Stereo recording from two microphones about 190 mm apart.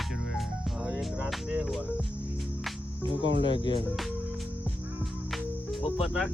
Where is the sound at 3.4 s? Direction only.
25° left (ahead or behind).